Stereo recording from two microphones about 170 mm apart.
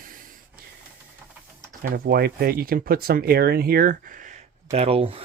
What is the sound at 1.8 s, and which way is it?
Speech, 60° right (ahead or behind).